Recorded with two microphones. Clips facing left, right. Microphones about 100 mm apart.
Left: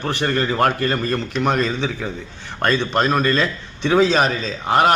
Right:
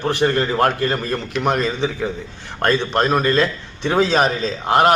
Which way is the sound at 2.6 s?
10° right (ahead or behind).